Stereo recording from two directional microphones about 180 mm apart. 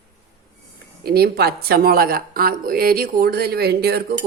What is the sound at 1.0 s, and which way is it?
Speech, 60° right (ahead or behind).